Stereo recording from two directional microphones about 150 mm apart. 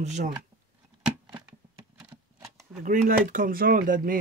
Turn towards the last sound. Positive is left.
turn(degrees=-65)  # may be behind; listen again after turning